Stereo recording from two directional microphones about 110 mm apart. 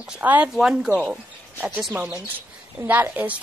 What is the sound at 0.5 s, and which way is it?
A woman's voice, 5° right (ahead or behind).